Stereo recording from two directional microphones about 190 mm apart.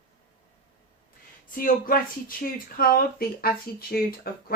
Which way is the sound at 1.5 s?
50° left (ahead or behind).